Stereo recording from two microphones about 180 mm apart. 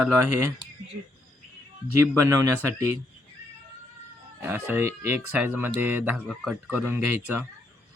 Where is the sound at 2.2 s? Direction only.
20° right (ahead or behind).